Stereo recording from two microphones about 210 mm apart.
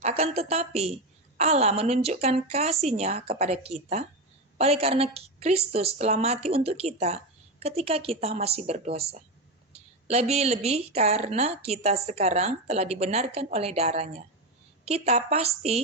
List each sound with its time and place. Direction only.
0.0 s a woman's voice: 30° right (ahead or behind)
10.1 s a woman's voice: 30° right (ahead or behind)